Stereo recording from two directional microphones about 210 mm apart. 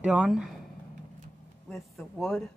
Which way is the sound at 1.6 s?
Centre (ahead or behind).